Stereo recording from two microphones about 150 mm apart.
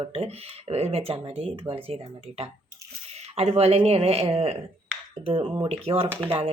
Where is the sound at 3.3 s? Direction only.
40° right (ahead or behind).